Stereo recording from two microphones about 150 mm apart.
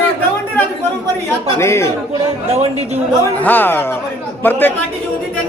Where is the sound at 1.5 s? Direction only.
20° left (ahead or behind).